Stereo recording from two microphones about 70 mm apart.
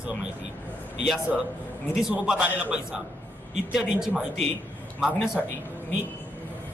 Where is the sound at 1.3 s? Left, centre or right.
Centre.